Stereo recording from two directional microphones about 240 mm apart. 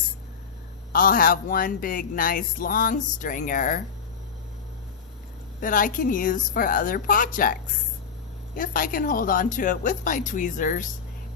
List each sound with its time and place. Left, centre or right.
0.9 s speech: left
5.5 s speech: left
8.5 s speech: left